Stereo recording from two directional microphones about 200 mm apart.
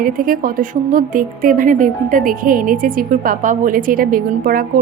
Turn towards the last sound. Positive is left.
turn(degrees=-45)  # may be behind; listen again after turning